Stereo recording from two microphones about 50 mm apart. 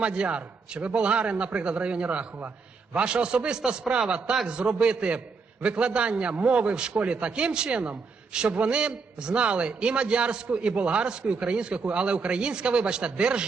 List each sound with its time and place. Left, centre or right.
0.0 s a man's voice: right